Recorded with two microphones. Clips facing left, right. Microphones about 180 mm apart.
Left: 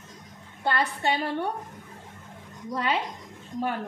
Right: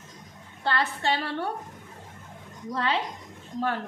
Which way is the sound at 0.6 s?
15° left (ahead or behind).